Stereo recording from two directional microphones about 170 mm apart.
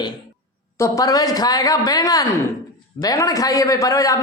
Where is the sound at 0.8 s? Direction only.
20° left (ahead or behind).